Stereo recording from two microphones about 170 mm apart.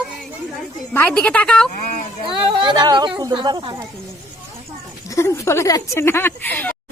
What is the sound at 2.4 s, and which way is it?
A woman's voice, 30° right (ahead or behind).